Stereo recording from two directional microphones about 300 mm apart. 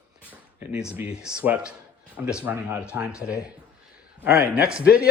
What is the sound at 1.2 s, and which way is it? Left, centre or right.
Speech, centre.